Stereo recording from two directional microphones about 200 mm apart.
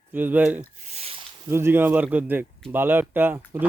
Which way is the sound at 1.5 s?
10° right (ahead or behind).